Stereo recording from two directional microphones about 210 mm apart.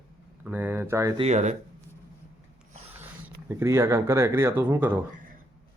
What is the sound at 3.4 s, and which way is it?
Speech, 15° right (ahead or behind).